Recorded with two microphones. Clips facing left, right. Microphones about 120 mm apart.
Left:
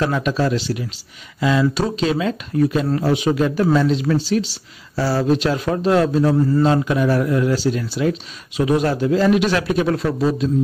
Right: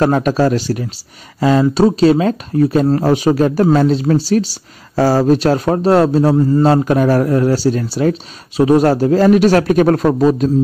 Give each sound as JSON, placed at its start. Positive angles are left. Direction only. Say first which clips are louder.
{"t": 0.0, "sound": "a man's voice", "louder": "right 6 dB", "side_deg": -45}